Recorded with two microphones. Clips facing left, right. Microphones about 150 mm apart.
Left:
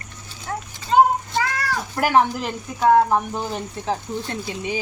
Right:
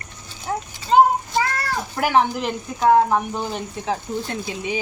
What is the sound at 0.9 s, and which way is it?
Child singing, 20° right (ahead or behind).